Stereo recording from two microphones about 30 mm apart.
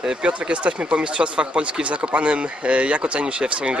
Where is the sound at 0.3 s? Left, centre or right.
Right.